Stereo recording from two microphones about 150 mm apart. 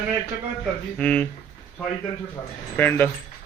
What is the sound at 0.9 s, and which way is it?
Speech, 10° left (ahead or behind).